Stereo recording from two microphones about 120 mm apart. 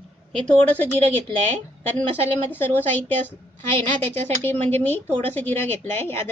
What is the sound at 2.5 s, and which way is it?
Speech, 15° left (ahead or behind).